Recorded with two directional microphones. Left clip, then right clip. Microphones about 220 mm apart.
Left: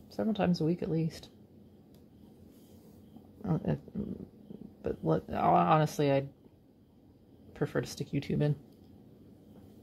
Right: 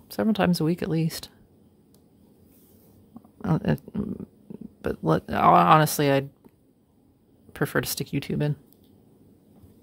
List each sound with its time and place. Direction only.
0.1 s speech: 40° right (ahead or behind)
3.4 s speech: 40° right (ahead or behind)
7.5 s speech: 40° right (ahead or behind)